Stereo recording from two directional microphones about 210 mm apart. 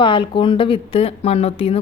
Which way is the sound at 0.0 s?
25° left (ahead or behind).